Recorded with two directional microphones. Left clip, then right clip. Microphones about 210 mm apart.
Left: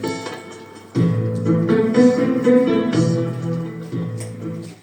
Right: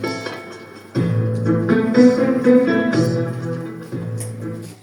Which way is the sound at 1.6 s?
30° left (ahead or behind).